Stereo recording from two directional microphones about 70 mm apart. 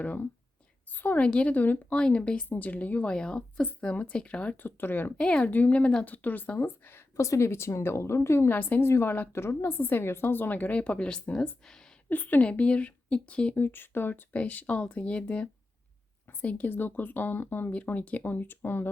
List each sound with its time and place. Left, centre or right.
0.0 s speech: left
5.1 s speech: centre
6.1 s a woman's voice: left; by 11.9 s centre
12.0 s speech: left
13.6 s speech: left